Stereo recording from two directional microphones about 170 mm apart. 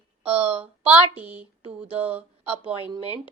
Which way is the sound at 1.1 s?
10° right (ahead or behind).